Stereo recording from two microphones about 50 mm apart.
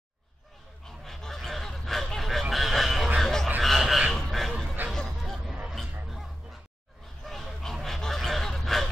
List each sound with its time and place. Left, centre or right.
0.8 s honk: centre
2.5 s a sound: centre
3.2 s frog: centre
4.1 s a sound: centre
4.9 s hubbub: centre
7.2 s honk: centre